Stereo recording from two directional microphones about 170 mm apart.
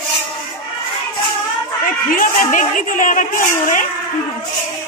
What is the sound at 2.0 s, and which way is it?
A woman's voice, 50° left (ahead or behind).